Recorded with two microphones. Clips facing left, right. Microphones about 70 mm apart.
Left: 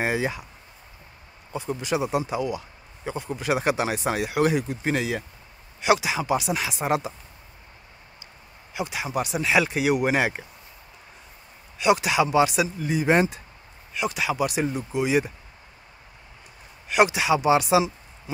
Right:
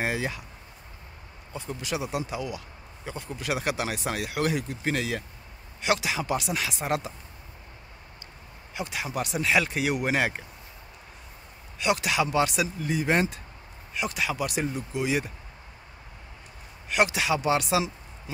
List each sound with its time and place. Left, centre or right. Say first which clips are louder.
0.0 s speech: left 4 dB; left
1.5 s speech: left 6 dB; left
8.7 s speech: left 4 dB; centre
11.8 s speech: left 5 dB; centre
13.9 s speech: left 4 dB; centre; by 15.3 s left
16.9 s speech: left 4 dB; centre